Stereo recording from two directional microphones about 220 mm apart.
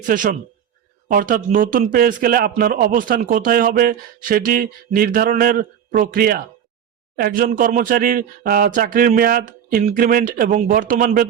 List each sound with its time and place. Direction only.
0.0 s speech: 35° right (ahead or behind)